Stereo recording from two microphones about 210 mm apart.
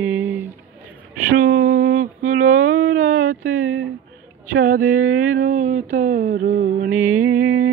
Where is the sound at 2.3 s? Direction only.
35° right (ahead or behind).